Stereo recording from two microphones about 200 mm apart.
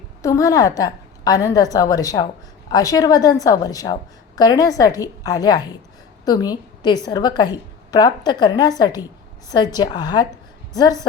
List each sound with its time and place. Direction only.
0.2 s a woman's voice: 15° left (ahead or behind)